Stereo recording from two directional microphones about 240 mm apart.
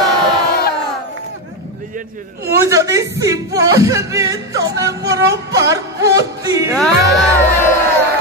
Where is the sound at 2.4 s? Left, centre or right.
Centre.